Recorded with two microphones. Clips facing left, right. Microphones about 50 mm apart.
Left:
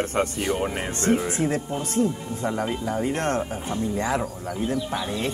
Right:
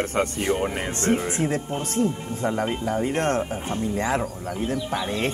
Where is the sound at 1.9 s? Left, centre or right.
Right.